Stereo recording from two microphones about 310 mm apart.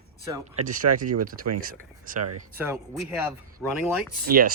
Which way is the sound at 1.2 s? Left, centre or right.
Right.